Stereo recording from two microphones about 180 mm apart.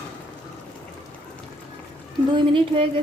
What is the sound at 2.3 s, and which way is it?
Speech, 30° right (ahead or behind).